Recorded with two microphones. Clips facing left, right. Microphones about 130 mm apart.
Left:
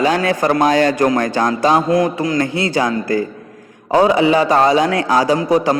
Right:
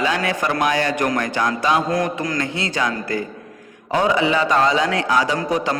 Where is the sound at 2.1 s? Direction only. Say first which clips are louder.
Left 6 dB; 25° left (ahead or behind).